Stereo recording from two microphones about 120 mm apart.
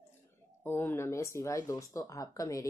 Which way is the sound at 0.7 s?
20° left (ahead or behind).